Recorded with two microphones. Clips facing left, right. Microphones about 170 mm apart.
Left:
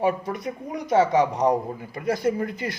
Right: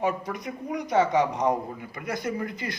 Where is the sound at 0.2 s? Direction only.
25° left (ahead or behind).